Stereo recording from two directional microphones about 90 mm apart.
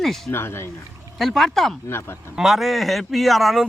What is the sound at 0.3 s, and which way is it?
Speech, 25° left (ahead or behind).